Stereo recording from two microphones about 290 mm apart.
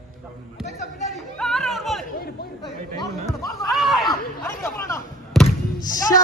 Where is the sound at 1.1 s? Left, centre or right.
Centre.